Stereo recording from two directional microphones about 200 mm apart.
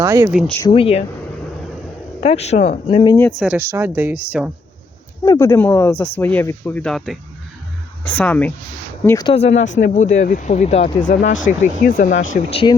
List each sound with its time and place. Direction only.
0.0 s speech: 15° right (ahead or behind)
0.3 s speech: 5° left (ahead or behind)
0.7 s speech: 30° left (ahead or behind)
2.2 s speech: 30° left (ahead or behind)
3.4 s speech: 10° right (ahead or behind)
5.2 s speech: 15° left (ahead or behind)
9.0 s speech: 20° left (ahead or behind)
9.3 s speech: 30° left (ahead or behind)
12.3 s speech: 30° left (ahead or behind)